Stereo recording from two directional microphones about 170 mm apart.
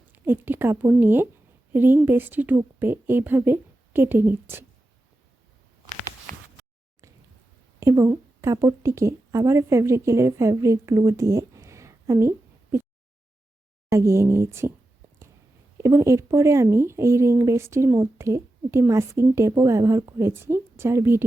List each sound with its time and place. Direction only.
0.1 s speech: 10° right (ahead or behind)
6.3 s a sound: 45° right (ahead or behind)
7.8 s a woman's voice: 20° right (ahead or behind)
13.9 s speech: 15° right (ahead or behind)
15.8 s speech: 15° right (ahead or behind)